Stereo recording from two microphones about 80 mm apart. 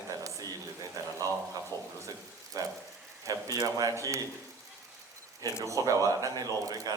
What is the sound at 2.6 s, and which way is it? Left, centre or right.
Speech, right.